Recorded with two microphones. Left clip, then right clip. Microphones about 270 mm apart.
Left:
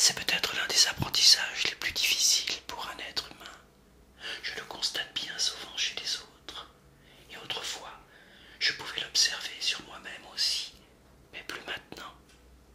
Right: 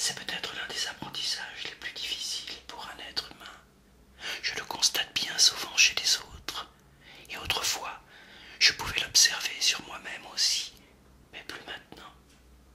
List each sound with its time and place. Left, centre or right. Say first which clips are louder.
0.0 s whispering: left 6 dB; centre
4.2 s whispering: right 3 dB; centre
11.3 s whispering: left 2 dB; centre